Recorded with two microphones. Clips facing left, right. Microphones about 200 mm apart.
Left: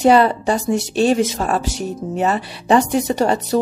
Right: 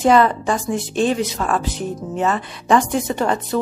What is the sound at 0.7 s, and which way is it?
Speech, 75° left (ahead or behind).